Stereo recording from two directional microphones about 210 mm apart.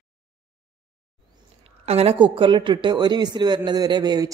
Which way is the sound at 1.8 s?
30° right (ahead or behind).